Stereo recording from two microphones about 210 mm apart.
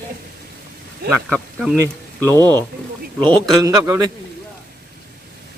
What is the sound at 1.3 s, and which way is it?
Speech, centre (ahead or behind).